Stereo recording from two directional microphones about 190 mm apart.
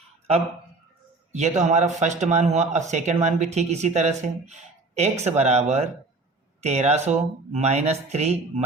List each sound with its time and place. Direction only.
1.3 s speech: 35° right (ahead or behind)